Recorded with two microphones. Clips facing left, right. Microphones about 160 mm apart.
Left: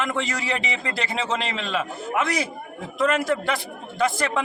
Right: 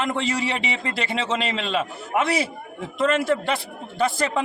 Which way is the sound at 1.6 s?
30° right (ahead or behind).